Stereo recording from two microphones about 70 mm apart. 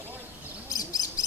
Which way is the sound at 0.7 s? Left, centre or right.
Left.